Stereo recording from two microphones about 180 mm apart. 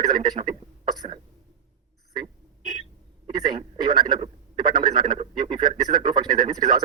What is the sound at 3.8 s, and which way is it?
Speech, 25° right (ahead or behind).